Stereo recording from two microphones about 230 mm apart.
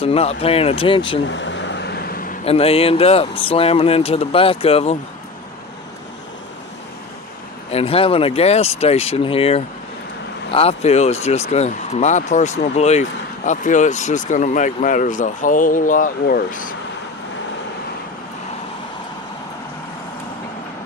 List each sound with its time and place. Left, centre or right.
0.0 s speech: left
1.3 s vehicle: left
2.4 s speech: left
7.7 s speech: left